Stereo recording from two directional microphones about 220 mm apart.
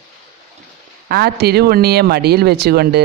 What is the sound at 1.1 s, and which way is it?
Speech, 45° right (ahead or behind).